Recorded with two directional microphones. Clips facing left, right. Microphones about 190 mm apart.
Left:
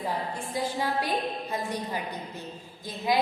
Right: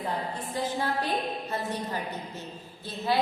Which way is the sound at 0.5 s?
10° left (ahead or behind).